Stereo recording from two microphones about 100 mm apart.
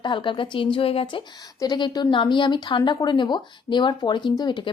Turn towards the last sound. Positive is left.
turn(degrees=50)  # may be behind; listen again after turning